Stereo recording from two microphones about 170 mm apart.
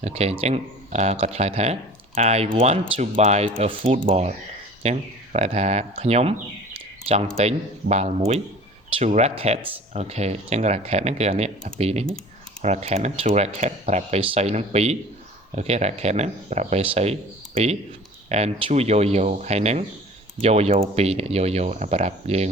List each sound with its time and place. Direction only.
0.0 s speech: 40° right (ahead or behind)
6.7 s a sound: 35° right (ahead or behind)
7.3 s speech: 40° right (ahead or behind)